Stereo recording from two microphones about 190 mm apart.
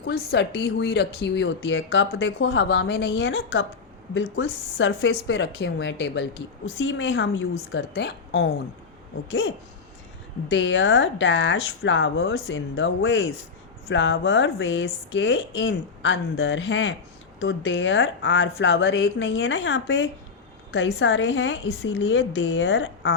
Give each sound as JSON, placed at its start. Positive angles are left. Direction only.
{"t": 0.0, "sound": "speech", "side_deg": 60}
{"t": 4.1, "sound": "a woman's voice", "side_deg": 75}
{"t": 6.7, "sound": "a woman's voice", "side_deg": 75}
{"t": 10.5, "sound": "a woman's voice", "side_deg": 75}